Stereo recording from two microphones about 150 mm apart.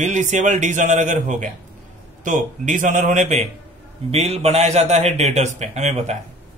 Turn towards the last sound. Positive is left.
turn(degrees=-50)  # may be behind; listen again after turning